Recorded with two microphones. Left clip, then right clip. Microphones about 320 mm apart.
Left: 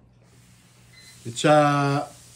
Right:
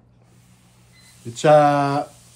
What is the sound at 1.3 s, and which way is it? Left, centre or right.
Speech, centre.